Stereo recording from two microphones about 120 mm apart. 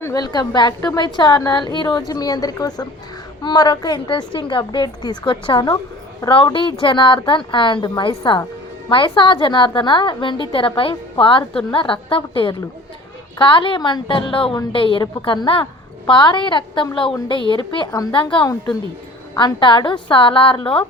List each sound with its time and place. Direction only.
0.0 s a woman's voice: 35° left (ahead or behind); by 20.8 s 50° left (ahead or behind)